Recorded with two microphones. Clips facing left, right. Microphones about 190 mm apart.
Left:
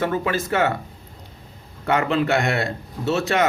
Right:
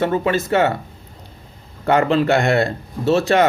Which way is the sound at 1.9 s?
35° right (ahead or behind).